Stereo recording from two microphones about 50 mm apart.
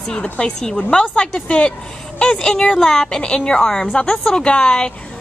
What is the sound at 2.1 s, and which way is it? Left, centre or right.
Speech, centre.